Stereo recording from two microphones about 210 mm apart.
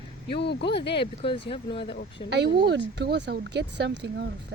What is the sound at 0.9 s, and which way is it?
Speech, 25° left (ahead or behind).